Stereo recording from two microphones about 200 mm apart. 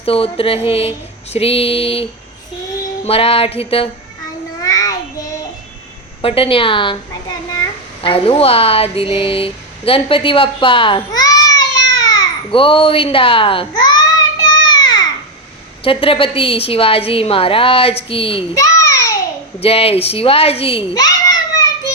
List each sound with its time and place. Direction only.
0.0 s speech: 30° left (ahead or behind)
4.6 s child singing: 20° left (ahead or behind)
6.2 s a child's voice: 25° left (ahead or behind)
14.6 s a sound: 20° left (ahead or behind)
15.8 s speech: 25° left (ahead or behind)
18.5 s a sound: 15° left (ahead or behind)
19.5 s a child's voice: 30° left (ahead or behind)